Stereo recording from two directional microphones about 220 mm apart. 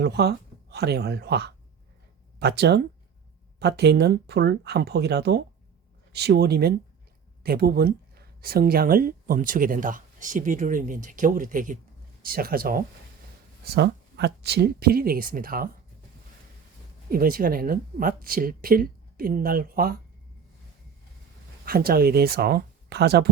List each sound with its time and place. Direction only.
0.0 s speech: 50° right (ahead or behind)
17.1 s speech: 40° right (ahead or behind)
21.7 s speech: 45° right (ahead or behind)